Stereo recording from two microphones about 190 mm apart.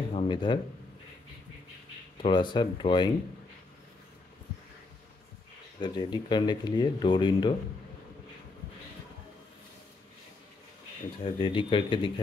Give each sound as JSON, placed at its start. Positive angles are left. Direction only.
{"t": 0.1, "sound": "speech", "side_deg": 25}
{"t": 2.2, "sound": "speech", "side_deg": 25}
{"t": 5.8, "sound": "speech", "side_deg": 25}
{"t": 11.3, "sound": "speech", "side_deg": 25}